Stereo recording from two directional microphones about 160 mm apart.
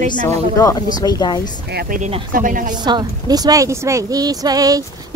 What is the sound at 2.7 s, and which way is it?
Speech, 25° right (ahead or behind).